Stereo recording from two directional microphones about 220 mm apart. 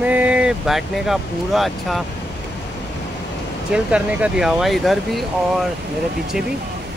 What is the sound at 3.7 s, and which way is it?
Speech, 5° right (ahead or behind).